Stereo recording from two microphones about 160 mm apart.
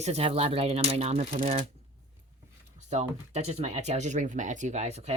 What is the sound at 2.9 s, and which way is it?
Speech, 45° right (ahead or behind).